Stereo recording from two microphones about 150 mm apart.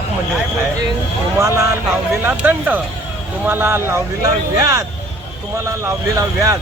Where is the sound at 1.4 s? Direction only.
20° right (ahead or behind).